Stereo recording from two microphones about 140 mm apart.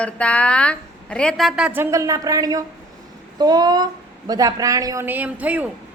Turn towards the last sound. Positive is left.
turn(degrees=-10)  # may be behind; listen again after turning